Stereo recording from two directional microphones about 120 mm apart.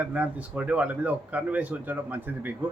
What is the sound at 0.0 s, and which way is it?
Speech, 10° right (ahead or behind).